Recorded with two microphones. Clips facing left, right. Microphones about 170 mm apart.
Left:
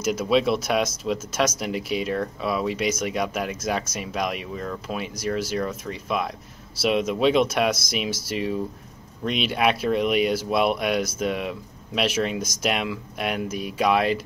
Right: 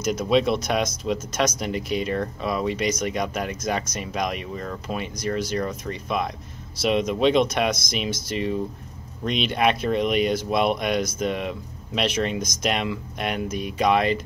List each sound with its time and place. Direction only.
0.0 s speech: 5° left (ahead or behind)